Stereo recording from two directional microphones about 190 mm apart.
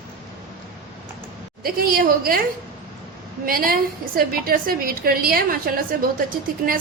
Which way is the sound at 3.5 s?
50° right (ahead or behind).